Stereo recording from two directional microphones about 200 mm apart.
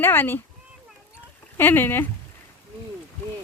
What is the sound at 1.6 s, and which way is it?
Speech, 10° left (ahead or behind).